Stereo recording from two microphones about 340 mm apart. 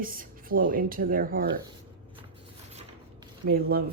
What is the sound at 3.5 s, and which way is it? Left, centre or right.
Speech, right.